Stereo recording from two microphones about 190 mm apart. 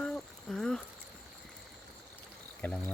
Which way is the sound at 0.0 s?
5° left (ahead or behind).